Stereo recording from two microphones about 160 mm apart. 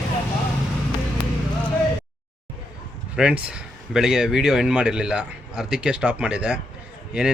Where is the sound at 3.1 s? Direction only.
5° right (ahead or behind).